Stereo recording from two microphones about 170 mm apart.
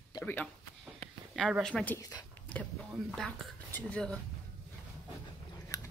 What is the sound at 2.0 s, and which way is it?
Speech, 20° left (ahead or behind).